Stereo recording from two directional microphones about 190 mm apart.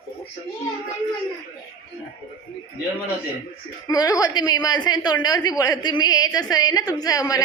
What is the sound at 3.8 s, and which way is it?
A woman's voice, 20° left (ahead or behind).